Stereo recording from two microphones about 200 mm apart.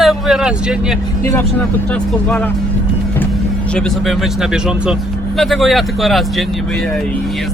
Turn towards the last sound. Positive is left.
turn(degrees=0)  # may be behind; listen again after turning